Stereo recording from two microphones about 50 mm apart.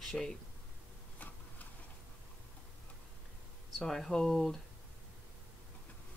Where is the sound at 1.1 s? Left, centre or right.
Left.